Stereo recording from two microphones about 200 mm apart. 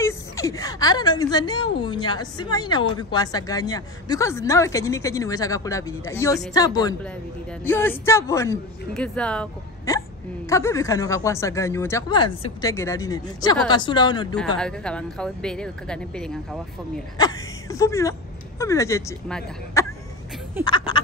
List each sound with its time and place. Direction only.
0.0 s a woman's voice: 15° left (ahead or behind)
9.9 s a woman's voice: 15° left (ahead or behind)
14.6 s speech: 5° left (ahead or behind)
17.2 s a woman's voice: 20° left (ahead or behind)
19.8 s throat clearing: 15° left (ahead or behind)
20.6 s speech: 25° left (ahead or behind)